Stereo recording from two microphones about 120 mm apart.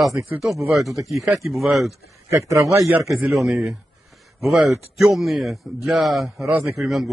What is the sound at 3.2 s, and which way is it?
Speech, centre (ahead or behind).